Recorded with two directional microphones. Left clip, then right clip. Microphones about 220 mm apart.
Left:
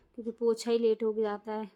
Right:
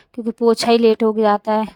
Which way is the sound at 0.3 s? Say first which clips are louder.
Right 14 dB; 45° right (ahead or behind).